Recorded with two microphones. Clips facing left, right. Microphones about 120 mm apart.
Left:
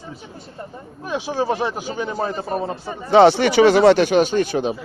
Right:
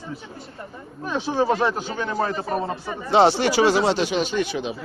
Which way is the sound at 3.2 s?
60° left (ahead or behind).